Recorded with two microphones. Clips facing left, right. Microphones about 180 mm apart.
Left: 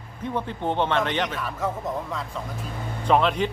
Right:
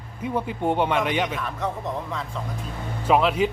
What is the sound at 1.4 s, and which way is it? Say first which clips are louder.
Speech: even; centre (ahead or behind).